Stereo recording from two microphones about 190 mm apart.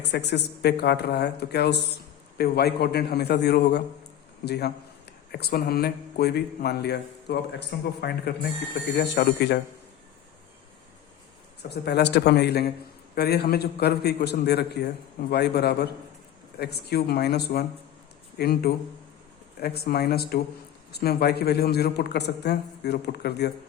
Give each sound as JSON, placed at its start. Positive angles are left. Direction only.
{"t": 0.0, "sound": "a man's voice", "side_deg": 60}
{"t": 11.7, "sound": "a man's voice", "side_deg": 60}